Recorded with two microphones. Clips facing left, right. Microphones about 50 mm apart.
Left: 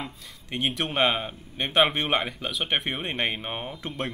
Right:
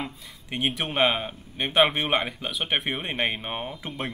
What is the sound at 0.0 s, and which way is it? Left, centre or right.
Speech, centre.